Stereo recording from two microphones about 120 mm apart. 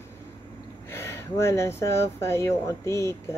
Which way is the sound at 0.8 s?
20° left (ahead or behind).